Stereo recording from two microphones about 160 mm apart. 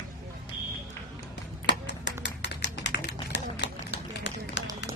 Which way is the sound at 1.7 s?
90° left.